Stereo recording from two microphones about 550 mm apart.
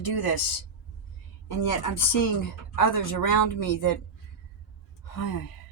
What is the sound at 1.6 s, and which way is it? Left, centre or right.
Speech, left.